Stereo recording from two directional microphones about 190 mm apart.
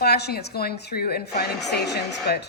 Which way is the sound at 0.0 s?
60° left (ahead or behind).